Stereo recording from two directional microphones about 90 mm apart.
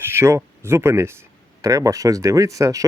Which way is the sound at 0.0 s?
30° right (ahead or behind).